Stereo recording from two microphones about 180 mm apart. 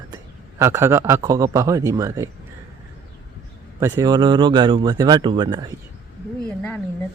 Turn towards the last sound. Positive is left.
turn(degrees=5)  # may be behind; listen again after turning